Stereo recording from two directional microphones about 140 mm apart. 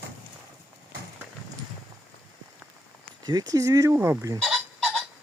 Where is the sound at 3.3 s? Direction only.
25° right (ahead or behind).